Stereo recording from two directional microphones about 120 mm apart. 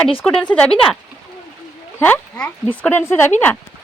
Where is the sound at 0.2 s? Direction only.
10° left (ahead or behind).